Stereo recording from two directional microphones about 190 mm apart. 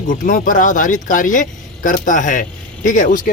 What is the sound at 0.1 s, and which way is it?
Speech, 45° left (ahead or behind).